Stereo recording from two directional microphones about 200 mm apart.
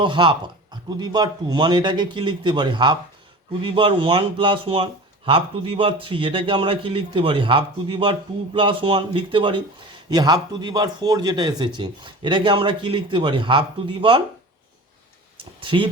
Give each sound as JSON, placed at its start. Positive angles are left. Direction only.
{"t": 0.0, "sound": "a man's voice", "side_deg": -25}
{"t": 15.6, "sound": "a man's voice", "side_deg": -25}